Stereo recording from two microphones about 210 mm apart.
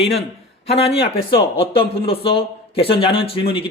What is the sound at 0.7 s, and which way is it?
Speech, 30° left (ahead or behind).